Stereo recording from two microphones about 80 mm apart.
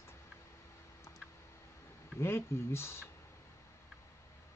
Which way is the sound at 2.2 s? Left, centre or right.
Left.